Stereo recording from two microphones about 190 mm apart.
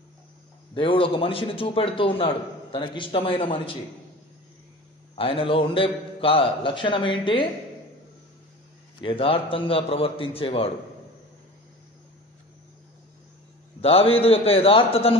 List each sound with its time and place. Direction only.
0.7 s a man's voice: 30° left (ahead or behind)
5.1 s a man's voice: 30° left (ahead or behind)
9.0 s a man's voice: 25° left (ahead or behind)
13.7 s a man's voice: 30° left (ahead or behind)